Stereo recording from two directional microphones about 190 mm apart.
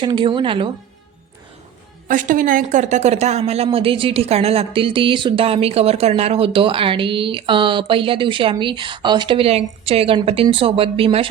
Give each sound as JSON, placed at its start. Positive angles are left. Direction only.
{"t": 0.0, "sound": "speech", "side_deg": -25}
{"t": 2.0, "sound": "speech", "side_deg": -45}